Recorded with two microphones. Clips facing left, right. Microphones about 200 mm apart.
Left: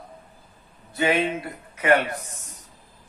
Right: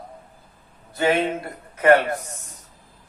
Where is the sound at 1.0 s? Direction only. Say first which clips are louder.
Right 2 dB; 50° right (ahead or behind).